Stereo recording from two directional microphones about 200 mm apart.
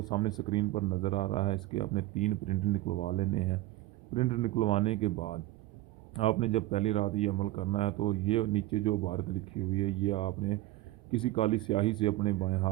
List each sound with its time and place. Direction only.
0.0 s a man's voice: 20° left (ahead or behind)